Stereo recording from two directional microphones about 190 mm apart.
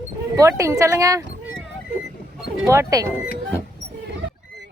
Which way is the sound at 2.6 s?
15° right (ahead or behind).